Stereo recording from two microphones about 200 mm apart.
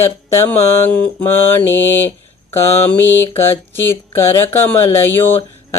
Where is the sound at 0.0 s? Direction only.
15° left (ahead or behind).